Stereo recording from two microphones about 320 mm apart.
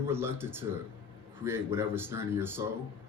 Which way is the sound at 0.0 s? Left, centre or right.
Centre.